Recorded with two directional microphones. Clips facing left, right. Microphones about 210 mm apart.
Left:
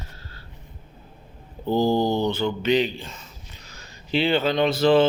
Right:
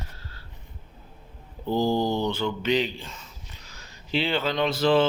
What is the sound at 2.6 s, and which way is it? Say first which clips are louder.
Speech: left 4 dB; 55° left (ahead or behind).